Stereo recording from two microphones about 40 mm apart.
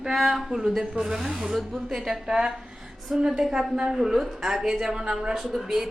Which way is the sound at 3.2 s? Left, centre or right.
Right.